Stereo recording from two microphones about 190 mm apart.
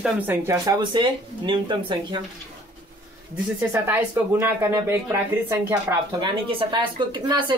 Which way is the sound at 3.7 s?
10° right (ahead or behind).